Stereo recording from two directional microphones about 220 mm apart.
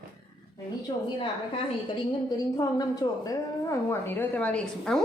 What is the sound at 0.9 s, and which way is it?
Speech, 20° left (ahead or behind).